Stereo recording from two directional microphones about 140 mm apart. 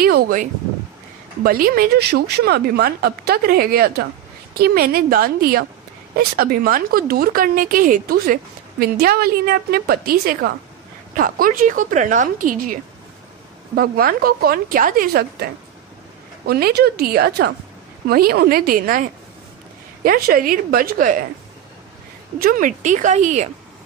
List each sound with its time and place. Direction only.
0.0 s speech: 70° right (ahead or behind)
1.4 s a woman's voice: 90° right; by 12.7 s 75° right (ahead or behind)
13.7 s speech: 90° right
16.5 s speech: 90° right
22.4 s speech: 80° right; by 23.5 s 55° right (ahead or behind)